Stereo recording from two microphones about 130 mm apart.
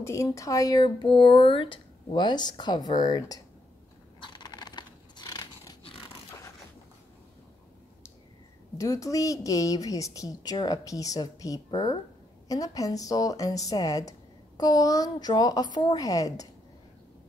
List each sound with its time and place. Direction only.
0.0 s a woman's voice: 20° left (ahead or behind)
4.2 s a sound: 35° left (ahead or behind)
8.7 s a woman's voice: 25° left (ahead or behind)